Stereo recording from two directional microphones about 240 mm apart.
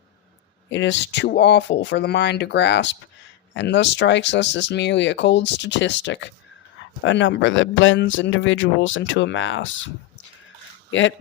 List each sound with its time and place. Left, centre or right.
0.7 s speech: left